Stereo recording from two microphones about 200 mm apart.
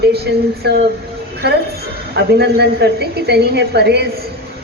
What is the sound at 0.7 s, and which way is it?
Speech, 55° right (ahead or behind).